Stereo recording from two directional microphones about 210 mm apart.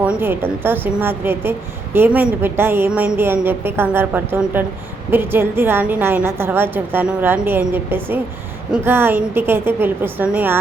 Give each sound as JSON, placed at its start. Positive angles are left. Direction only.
{"t": 0.0, "sound": "a woman's voice", "side_deg": -10}